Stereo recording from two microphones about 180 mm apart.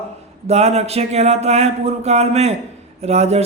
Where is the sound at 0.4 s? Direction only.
35° right (ahead or behind).